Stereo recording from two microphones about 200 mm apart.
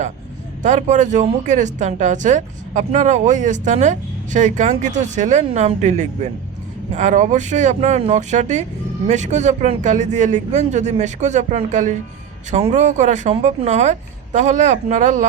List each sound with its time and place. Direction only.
0.6 s a woman's voice: 35° right (ahead or behind)